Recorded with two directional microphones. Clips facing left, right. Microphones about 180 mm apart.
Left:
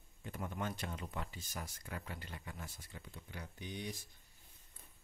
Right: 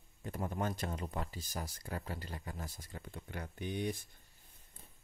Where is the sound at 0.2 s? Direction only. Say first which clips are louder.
Right 4 dB; 40° right (ahead or behind); by 4.0 s 55° right (ahead or behind).